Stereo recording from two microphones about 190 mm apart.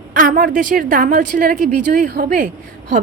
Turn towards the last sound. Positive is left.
turn(degrees=-45)  # may be behind; listen again after turning